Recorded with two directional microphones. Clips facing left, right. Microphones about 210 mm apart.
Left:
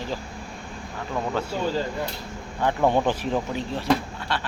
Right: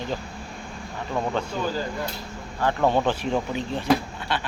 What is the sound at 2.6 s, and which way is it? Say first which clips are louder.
Speech: even; 15° left (ahead or behind).